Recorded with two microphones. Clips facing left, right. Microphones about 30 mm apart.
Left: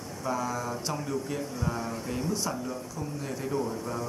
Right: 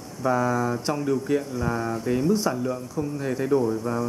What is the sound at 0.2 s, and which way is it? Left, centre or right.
Speech, right.